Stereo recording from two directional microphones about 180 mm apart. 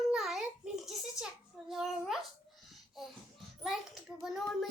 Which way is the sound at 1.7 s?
Centre (ahead or behind).